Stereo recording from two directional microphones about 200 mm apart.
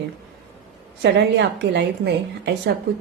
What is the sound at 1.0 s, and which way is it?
A woman's voice, 60° right (ahead or behind).